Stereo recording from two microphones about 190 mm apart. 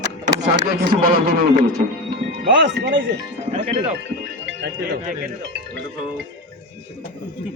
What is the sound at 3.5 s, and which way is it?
Speech, 35° right (ahead or behind).